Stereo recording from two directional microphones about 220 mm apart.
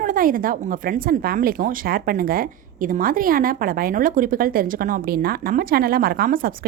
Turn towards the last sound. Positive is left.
turn(degrees=-40)  # may be behind; listen again after turning